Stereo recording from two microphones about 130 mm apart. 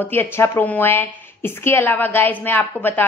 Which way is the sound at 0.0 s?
15° left (ahead or behind).